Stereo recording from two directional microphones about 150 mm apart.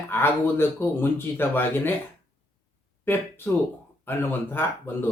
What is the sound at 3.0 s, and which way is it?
Speech, 15° left (ahead or behind).